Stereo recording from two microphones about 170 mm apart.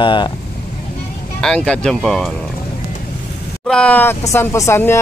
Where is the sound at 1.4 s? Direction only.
5° left (ahead or behind).